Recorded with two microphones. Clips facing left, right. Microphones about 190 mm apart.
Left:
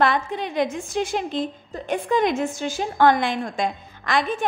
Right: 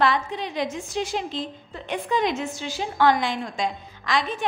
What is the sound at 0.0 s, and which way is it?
A woman's voice, 55° left (ahead or behind).